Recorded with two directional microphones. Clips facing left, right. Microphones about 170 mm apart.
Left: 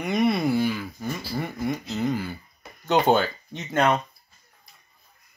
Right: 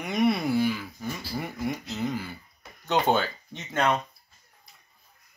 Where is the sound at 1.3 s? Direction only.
5° right (ahead or behind).